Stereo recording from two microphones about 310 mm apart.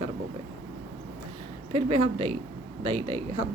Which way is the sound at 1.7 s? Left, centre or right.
Centre.